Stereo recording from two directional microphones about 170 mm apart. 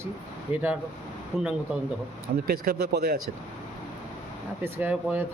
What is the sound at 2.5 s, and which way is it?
Speech, 65° right (ahead or behind).